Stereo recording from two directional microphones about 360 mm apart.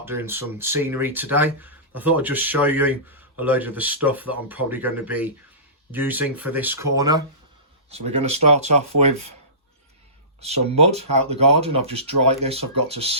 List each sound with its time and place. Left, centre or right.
0.0 s speech: centre
10.4 s speech: centre
11.0 s speech: right
11.3 s speech: centre